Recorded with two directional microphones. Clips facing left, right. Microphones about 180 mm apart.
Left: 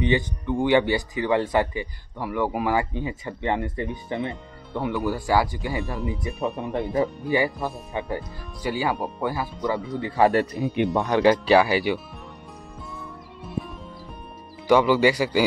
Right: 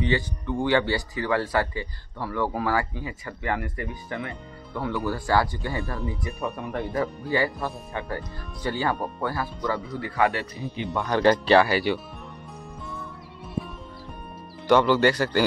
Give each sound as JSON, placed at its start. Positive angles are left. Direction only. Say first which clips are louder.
{"t": 0.0, "sound": "speech", "louder": "left 3 dB", "side_deg": 15}
{"t": 10.5, "sound": "speech", "louder": "left 8 dB", "side_deg": 65}
{"t": 11.1, "sound": "speech", "louder": "even", "side_deg": 10}
{"t": 14.7, "sound": "speech", "louder": "left 1 dB", "side_deg": 5}